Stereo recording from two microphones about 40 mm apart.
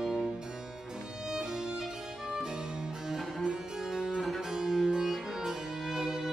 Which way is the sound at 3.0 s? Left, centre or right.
Centre.